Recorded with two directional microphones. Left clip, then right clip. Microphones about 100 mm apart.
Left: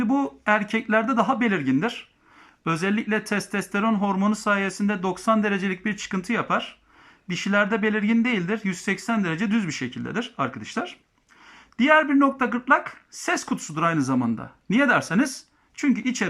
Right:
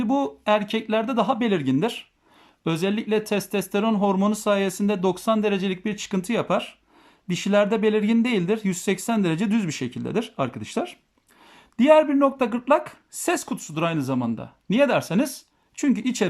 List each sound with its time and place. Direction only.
0.0 s speech: 30° right (ahead or behind)